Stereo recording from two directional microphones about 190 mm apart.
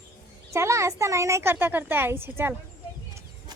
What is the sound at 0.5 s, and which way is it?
Speech, 15° right (ahead or behind).